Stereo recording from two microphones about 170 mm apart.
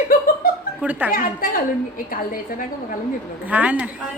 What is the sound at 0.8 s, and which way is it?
Snicker, 10° right (ahead or behind).